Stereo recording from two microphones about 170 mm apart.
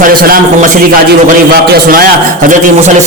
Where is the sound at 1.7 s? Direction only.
60° right (ahead or behind).